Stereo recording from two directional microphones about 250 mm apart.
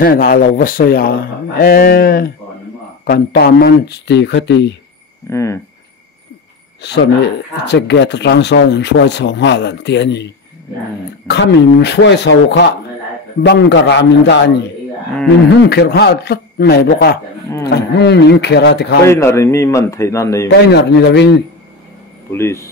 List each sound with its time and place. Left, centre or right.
0.0 s speech: left
5.3 s a man's voice: centre
6.8 s speech: left
19.0 s a man's voice: centre
20.4 s speech: left
22.3 s a man's voice: centre